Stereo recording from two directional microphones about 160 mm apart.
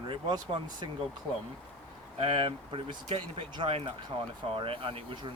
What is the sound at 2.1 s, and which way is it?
Speech, 30° right (ahead or behind).